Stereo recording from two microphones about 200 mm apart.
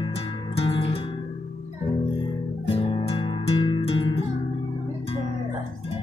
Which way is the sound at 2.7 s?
25° left (ahead or behind).